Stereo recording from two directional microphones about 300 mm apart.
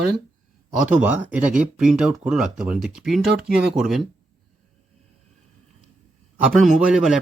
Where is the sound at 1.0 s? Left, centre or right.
Centre.